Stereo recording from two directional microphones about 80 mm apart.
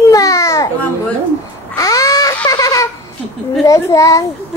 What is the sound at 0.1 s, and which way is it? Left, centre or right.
Babbling, left.